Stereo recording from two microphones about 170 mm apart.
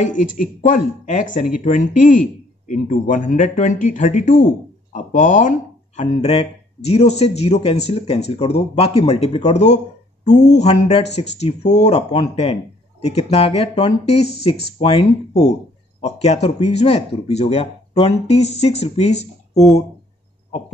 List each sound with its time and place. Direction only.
0.1 s speech: 50° left (ahead or behind)